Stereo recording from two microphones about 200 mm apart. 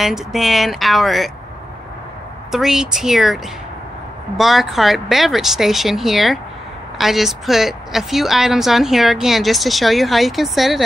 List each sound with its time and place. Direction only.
0.0 s a woman's voice: centre (ahead or behind)
2.5 s a woman's voice: centre (ahead or behind)
4.4 s a woman's voice: centre (ahead or behind)